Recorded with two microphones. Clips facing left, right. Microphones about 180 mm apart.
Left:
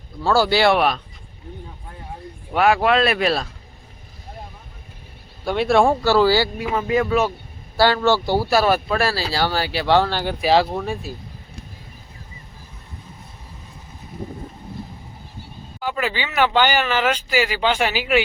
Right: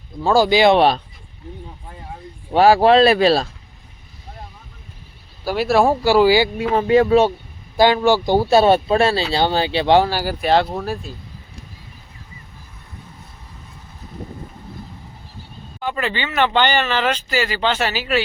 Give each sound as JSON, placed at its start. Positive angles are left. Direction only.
{"t": 0.2, "sound": "speech", "side_deg": -15}
{"t": 0.8, "sound": "speech", "side_deg": -30}
{"t": 2.5, "sound": "speech", "side_deg": -30}
{"t": 5.5, "sound": "speech", "side_deg": -5}
{"t": 6.7, "sound": "speech", "side_deg": -30}
{"t": 7.8, "sound": "speech", "side_deg": -15}
{"t": 15.8, "sound": "speech", "side_deg": 5}